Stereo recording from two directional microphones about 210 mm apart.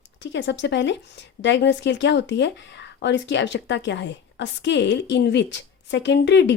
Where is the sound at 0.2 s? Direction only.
60° left (ahead or behind).